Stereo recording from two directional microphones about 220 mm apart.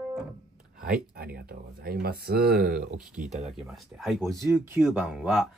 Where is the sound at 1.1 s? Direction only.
45° right (ahead or behind).